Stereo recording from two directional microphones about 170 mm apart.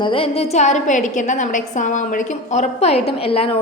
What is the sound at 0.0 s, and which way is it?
A woman's voice, 35° left (ahead or behind).